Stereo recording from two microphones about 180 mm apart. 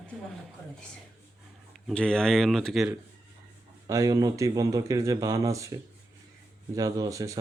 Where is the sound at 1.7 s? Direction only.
Centre (ahead or behind).